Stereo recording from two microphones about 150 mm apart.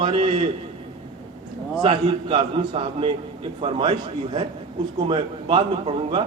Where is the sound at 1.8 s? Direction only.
35° right (ahead or behind).